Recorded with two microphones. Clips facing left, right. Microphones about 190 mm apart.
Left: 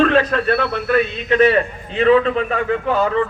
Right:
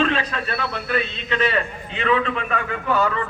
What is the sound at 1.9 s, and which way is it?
A man's voice, 35° left (ahead or behind).